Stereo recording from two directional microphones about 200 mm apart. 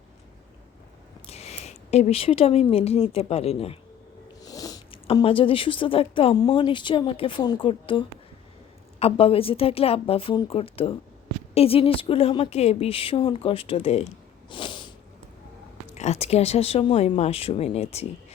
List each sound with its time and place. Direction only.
1.3 s speech: 30° left (ahead or behind)
4.4 s a woman's voice: 20° left (ahead or behind)
14.5 s a sound: 25° left (ahead or behind)
16.0 s speech: 30° left (ahead or behind)